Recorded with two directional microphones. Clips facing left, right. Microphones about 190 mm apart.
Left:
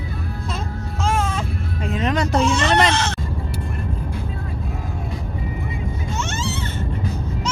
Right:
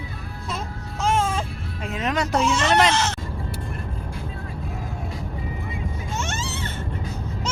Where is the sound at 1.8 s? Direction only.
5° right (ahead or behind).